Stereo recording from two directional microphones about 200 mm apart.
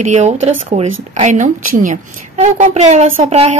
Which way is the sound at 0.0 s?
35° right (ahead or behind).